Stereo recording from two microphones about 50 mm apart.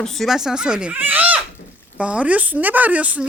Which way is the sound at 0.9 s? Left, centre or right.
Right.